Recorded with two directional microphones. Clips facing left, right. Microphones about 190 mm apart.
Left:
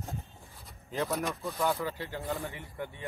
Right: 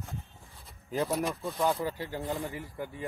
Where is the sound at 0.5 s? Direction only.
Centre (ahead or behind).